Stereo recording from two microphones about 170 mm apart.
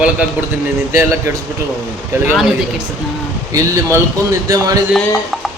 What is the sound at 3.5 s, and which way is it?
A man's voice, 15° right (ahead or behind).